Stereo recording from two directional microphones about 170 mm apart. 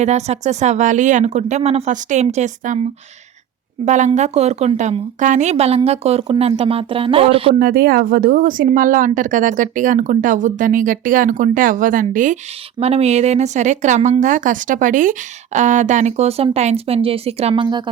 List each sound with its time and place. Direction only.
0.0 s a woman's voice: 40° right (ahead or behind)
3.8 s a woman's voice: 45° right (ahead or behind)
7.6 s a woman's voice: 60° right (ahead or behind)
12.8 s a woman's voice: 35° right (ahead or behind)
17.5 s speech: 25° right (ahead or behind)